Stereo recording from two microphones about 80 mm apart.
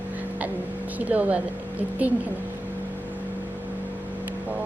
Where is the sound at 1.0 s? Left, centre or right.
Right.